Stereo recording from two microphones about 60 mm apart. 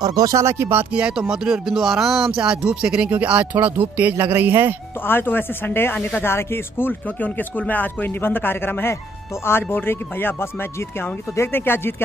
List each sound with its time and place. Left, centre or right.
0.1 s speech: right
0.4 s speech: right
0.9 s speech: centre
1.2 s speech: centre
2.3 s speech: centre; by 4.7 s right
5.0 s speech: left